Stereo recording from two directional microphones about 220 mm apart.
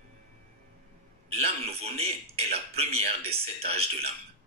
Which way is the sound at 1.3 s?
25° right (ahead or behind).